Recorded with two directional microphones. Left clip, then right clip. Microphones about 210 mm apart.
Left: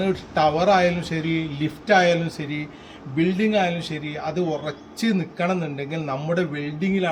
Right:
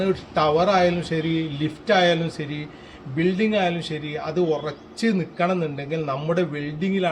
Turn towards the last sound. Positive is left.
turn(degrees=-15)  # may be behind; listen again after turning